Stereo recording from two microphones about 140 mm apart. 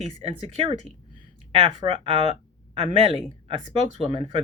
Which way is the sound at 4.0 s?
35° right (ahead or behind).